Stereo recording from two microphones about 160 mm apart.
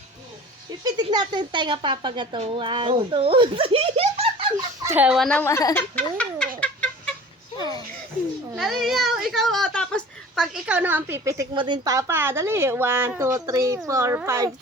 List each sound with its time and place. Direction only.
0.9 s a child's voice: 25° right (ahead or behind)
4.8 s speech: 15° right (ahead or behind)
5.4 s a child's voice: 20° left (ahead or behind)
6.6 s cat: 5° left (ahead or behind)
8.5 s speech: centre (ahead or behind); by 11.4 s 15° right (ahead or behind)
11.5 s a woman's voice: 30° right (ahead or behind)